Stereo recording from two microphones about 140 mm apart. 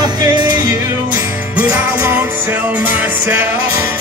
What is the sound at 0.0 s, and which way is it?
Music, 30° right (ahead or behind).